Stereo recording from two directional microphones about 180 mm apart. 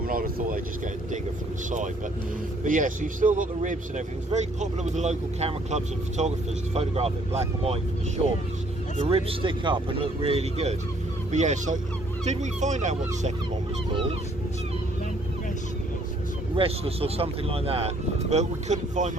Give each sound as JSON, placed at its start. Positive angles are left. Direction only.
{"t": 0.1, "sound": "speech", "side_deg": -55}
{"t": 2.6, "sound": "speech", "side_deg": -45}
{"t": 9.0, "sound": "speech", "side_deg": -30}
{"t": 16.6, "sound": "speech", "side_deg": -30}